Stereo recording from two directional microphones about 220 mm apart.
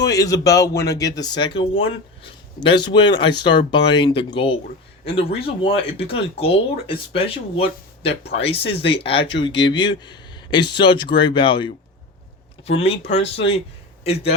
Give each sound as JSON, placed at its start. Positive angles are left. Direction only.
{"t": 0.0, "sound": "speech", "side_deg": 15}
{"t": 3.2, "sound": "speech", "side_deg": 20}